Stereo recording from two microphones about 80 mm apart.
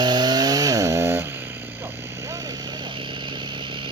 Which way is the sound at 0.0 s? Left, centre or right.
Right.